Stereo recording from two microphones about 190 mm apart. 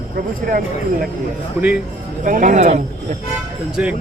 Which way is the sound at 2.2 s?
45° right (ahead or behind).